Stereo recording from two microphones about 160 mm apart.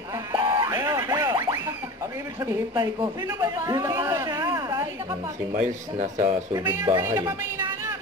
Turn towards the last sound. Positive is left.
turn(degrees=-15)  # may be behind; listen again after turning